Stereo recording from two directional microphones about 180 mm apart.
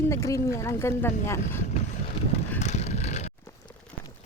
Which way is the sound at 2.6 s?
40° left (ahead or behind).